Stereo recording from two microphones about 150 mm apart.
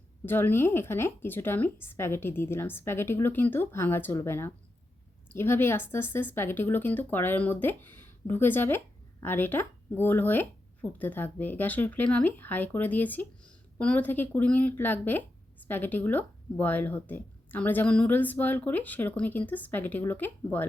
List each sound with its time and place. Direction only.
0.3 s speech: 15° left (ahead or behind)